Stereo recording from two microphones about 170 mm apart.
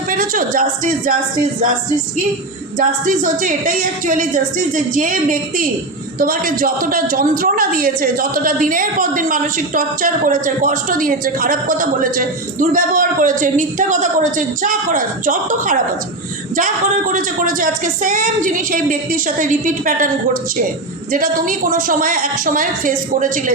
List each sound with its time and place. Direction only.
0.1 s a woman's voice: 55° right (ahead or behind)
2.7 s a woman's voice: 50° right (ahead or behind)